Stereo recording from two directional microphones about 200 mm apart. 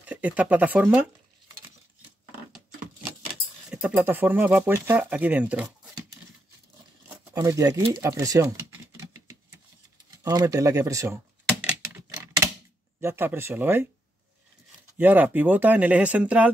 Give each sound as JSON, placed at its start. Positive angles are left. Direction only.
{"t": 0.0, "sound": "speech", "side_deg": -5}
{"t": 3.7, "sound": "speech", "side_deg": -5}
{"t": 7.1, "sound": "speech", "side_deg": -15}
{"t": 10.1, "sound": "speech", "side_deg": -15}
{"t": 11.6, "sound": "a sound", "side_deg": -10}
{"t": 13.0, "sound": "speech", "side_deg": -10}
{"t": 15.0, "sound": "speech", "side_deg": -10}